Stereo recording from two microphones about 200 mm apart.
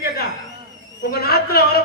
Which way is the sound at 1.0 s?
50° left (ahead or behind).